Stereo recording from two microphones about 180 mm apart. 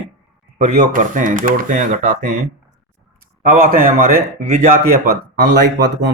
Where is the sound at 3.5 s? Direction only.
50° right (ahead or behind).